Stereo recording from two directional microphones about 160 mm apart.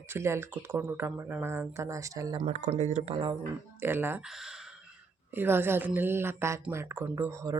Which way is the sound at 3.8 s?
15° right (ahead or behind).